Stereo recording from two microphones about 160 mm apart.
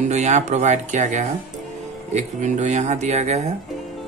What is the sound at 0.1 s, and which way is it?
Speech, 45° right (ahead or behind).